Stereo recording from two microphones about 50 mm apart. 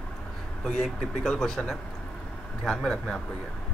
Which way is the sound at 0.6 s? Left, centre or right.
Centre.